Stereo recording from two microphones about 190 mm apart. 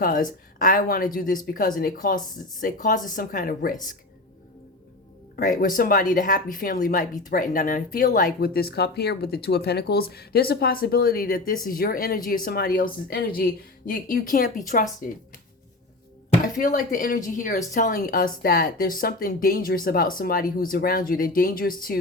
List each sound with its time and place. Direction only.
0.6 s speech: 45° left (ahead or behind)
5.4 s speech: 45° left (ahead or behind)
16.4 s speech: 45° left (ahead or behind)